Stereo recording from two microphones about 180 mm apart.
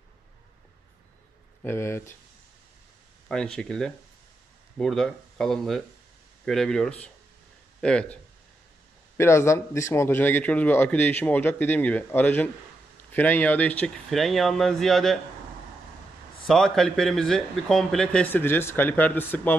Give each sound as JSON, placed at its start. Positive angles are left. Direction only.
{"t": 1.6, "sound": "a man's voice", "side_deg": 15}
{"t": 3.3, "sound": "a man's voice", "side_deg": 5}
{"t": 16.4, "sound": "speech", "side_deg": 0}